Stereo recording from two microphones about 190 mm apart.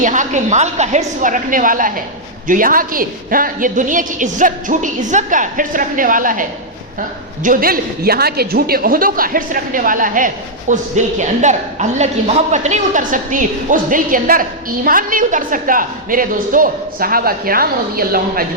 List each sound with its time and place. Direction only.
0.0 s a woman's voice: 40° right (ahead or behind)
7.4 s a woman's voice: 50° right (ahead or behind)